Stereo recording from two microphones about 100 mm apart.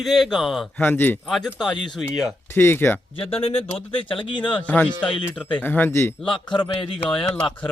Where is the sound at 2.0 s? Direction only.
Centre (ahead or behind).